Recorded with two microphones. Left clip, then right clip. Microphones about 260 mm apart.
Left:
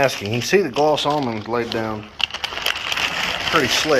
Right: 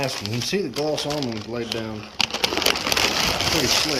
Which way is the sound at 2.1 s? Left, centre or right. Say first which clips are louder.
Right 4 dB; right.